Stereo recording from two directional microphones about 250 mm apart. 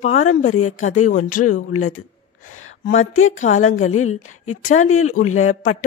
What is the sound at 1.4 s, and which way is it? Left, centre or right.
Speech, left.